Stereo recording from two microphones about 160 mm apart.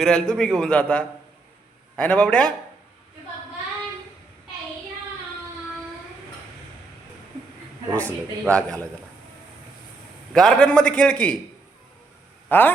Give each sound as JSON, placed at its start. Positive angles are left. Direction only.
{"t": 0.0, "sound": "a man's voice", "side_deg": 5}
{"t": 7.9, "sound": "a man's voice", "side_deg": 10}
{"t": 10.3, "sound": "a man's voice", "side_deg": 5}
{"t": 12.5, "sound": "speech", "side_deg": 10}